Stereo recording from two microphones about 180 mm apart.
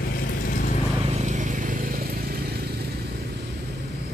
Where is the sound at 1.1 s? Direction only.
40° right (ahead or behind); by 2.8 s 60° right (ahead or behind).